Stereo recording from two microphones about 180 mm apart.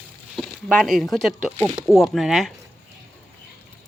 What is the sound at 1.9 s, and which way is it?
Speech, centre (ahead or behind).